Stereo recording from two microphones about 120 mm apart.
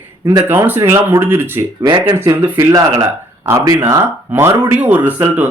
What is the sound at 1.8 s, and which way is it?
Speech, 45° right (ahead or behind).